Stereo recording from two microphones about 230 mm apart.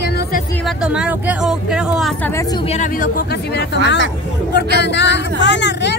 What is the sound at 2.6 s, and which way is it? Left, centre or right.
Speech, left.